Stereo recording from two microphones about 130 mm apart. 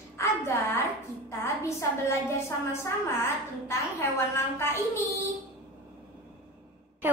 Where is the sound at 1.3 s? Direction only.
20° left (ahead or behind).